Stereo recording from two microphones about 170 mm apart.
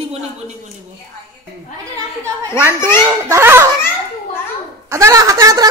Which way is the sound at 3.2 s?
15° right (ahead or behind).